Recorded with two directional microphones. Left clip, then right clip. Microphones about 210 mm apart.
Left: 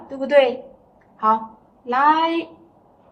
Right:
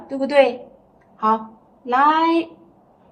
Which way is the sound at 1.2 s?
35° right (ahead or behind).